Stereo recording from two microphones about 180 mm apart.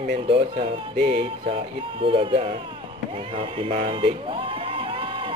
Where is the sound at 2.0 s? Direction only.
30° right (ahead or behind).